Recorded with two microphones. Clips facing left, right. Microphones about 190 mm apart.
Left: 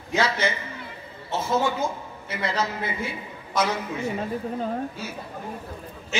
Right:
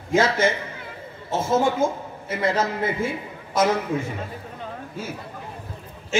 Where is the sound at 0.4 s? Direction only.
50° right (ahead or behind).